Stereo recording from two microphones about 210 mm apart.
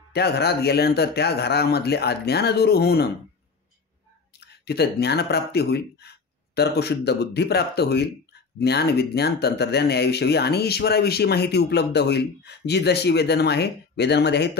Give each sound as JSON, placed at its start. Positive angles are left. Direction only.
{"t": 0.1, "sound": "speech", "side_deg": 50}
{"t": 4.5, "sound": "speech", "side_deg": 50}